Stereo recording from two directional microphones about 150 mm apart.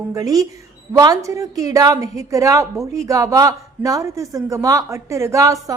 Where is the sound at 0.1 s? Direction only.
25° right (ahead or behind).